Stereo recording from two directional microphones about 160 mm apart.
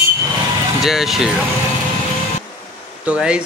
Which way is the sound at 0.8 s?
Centre (ahead or behind).